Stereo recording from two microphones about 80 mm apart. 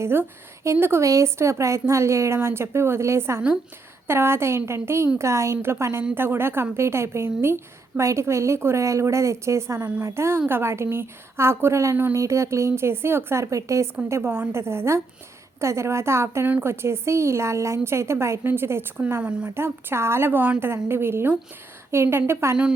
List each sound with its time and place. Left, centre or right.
0.0 s a woman's voice: right
14.1 s a woman's voice: right
19.2 s speech: centre
19.5 s a woman's voice: right